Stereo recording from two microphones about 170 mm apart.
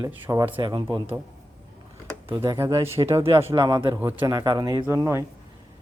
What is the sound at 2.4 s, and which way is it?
Speech, 20° right (ahead or behind).